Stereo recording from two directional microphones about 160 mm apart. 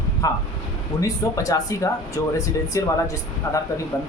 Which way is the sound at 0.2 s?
20° left (ahead or behind).